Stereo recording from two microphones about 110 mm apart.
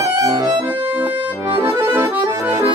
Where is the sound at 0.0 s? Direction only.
30° right (ahead or behind).